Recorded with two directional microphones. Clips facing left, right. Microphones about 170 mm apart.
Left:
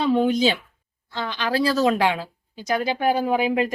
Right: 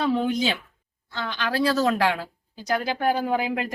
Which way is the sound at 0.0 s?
25° left (ahead or behind).